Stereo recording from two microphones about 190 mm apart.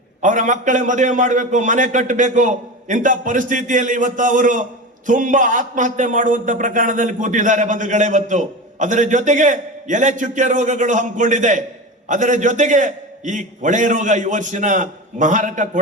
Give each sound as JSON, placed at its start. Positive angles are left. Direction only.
{"t": 0.2, "sound": "a man's voice", "side_deg": -40}